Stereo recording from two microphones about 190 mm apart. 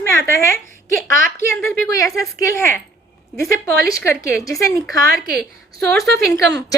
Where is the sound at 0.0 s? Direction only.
15° left (ahead or behind).